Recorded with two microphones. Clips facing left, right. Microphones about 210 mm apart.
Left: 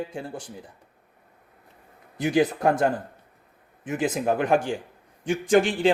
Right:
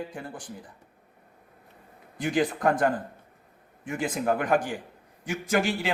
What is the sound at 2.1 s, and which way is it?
Speech, 20° left (ahead or behind).